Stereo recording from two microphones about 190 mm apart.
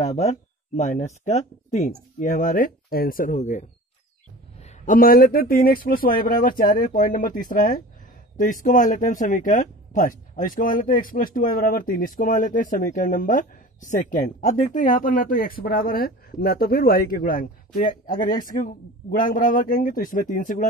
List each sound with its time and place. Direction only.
0.0 s speech: 35° left (ahead or behind)
4.8 s speech: 50° left (ahead or behind)